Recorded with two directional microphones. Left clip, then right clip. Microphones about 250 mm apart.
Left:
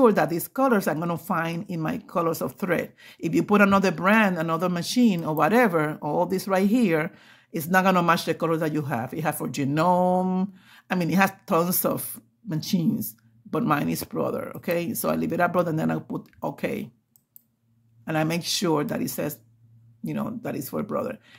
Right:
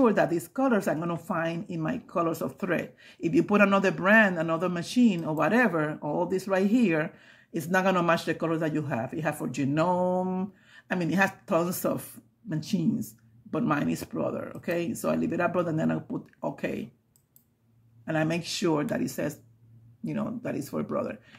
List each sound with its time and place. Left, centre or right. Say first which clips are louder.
0.0 s speech: left 4 dB; left
18.0 s speech: left 3 dB; left